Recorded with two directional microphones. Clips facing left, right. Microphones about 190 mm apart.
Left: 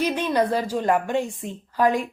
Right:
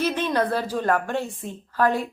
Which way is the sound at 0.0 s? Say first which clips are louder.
Left 1 dB; 10° left (ahead or behind).